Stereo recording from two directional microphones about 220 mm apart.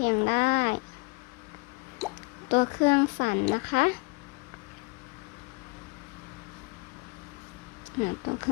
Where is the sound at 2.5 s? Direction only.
35° left (ahead or behind).